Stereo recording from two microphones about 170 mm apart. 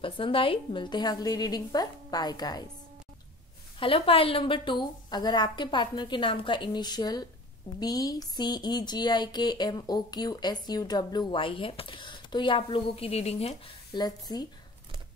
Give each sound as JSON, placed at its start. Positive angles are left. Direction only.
{"t": 0.0, "sound": "speech", "side_deg": 30}
{"t": 3.8, "sound": "speech", "side_deg": 30}